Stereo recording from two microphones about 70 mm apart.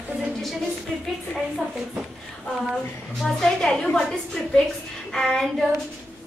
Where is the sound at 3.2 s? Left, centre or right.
Centre.